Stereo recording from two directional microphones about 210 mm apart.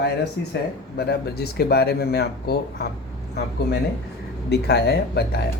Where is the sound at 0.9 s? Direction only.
50° left (ahead or behind).